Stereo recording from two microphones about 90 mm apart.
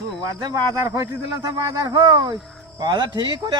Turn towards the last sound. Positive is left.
turn(degrees=-50)  # may be behind; listen again after turning